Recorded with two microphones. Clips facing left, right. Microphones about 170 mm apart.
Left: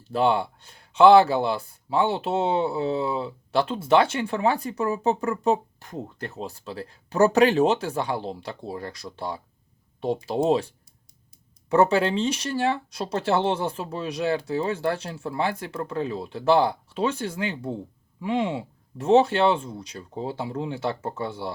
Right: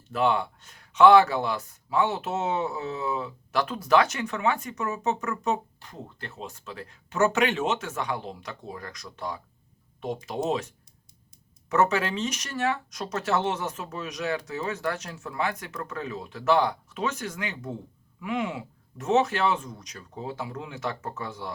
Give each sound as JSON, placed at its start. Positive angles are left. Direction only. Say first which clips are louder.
{"t": 0.0, "sound": "speech", "louder": "left 3 dB", "side_deg": 30}
{"t": 5.8, "sound": "speech", "louder": "left 7 dB", "side_deg": 45}